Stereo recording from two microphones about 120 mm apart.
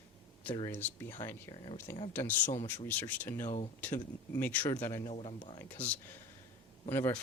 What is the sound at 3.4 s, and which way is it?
Speech, 70° left (ahead or behind).